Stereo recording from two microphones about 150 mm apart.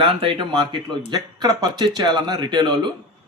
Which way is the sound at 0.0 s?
35° right (ahead or behind).